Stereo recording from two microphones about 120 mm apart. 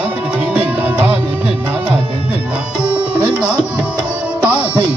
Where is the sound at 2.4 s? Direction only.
10° right (ahead or behind).